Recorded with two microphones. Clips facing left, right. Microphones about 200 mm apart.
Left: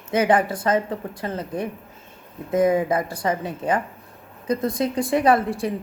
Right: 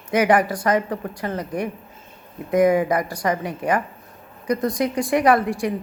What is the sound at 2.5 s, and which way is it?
Speech, 25° left (ahead or behind).